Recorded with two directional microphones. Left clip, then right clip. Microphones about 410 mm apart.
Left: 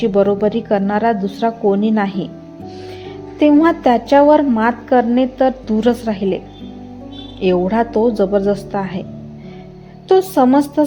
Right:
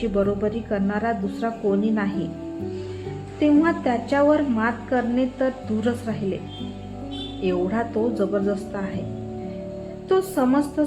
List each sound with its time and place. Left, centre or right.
0.0 s a woman's voice: centre
3.4 s a woman's voice: centre
7.4 s a woman's voice: centre
10.1 s a woman's voice: centre